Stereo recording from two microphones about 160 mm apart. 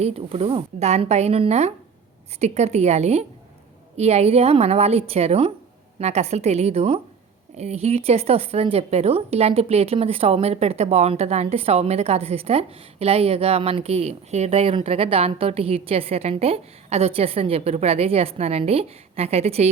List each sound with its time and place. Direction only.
0.0 s a woman's voice: 40° right (ahead or behind)